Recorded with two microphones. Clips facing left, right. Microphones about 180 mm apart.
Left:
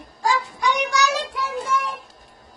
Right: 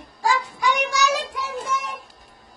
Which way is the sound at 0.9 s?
15° right (ahead or behind).